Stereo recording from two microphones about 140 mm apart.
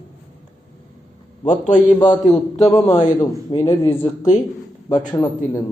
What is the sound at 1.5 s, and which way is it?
Speech, 60° left (ahead or behind).